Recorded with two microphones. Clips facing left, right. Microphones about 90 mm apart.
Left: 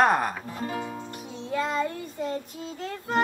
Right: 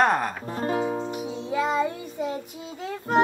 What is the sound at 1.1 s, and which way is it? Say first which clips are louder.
Child singing: right 3 dB; 10° right (ahead or behind).